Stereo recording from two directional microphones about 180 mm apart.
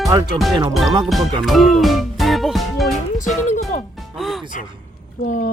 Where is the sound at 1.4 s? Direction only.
Centre (ahead or behind).